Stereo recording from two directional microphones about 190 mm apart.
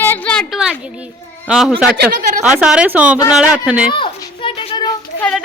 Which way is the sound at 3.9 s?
25° left (ahead or behind).